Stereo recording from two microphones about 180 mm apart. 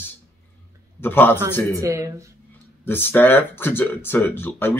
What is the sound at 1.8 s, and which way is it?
Speech, 15° right (ahead or behind).